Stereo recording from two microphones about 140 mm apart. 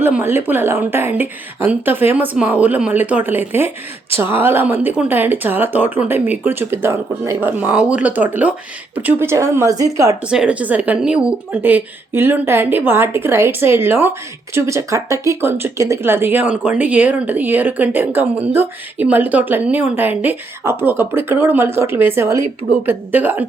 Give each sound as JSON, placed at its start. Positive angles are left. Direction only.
{"t": 0.0, "sound": "speech", "side_deg": -15}
{"t": 10.2, "sound": "speech", "side_deg": -5}